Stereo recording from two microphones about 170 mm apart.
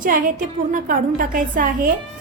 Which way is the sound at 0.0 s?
55° right (ahead or behind).